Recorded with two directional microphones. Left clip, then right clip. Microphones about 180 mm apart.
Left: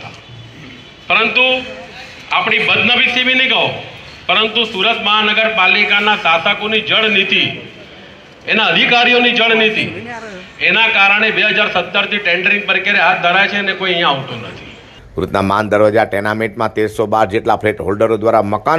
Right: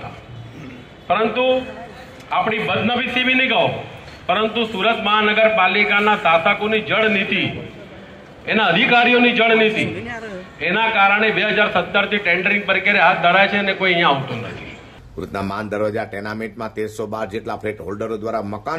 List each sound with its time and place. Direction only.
1.0 s a man's voice: 40° right (ahead or behind)
8.5 s a man's voice: 45° right (ahead or behind)
15.1 s speech: 25° left (ahead or behind)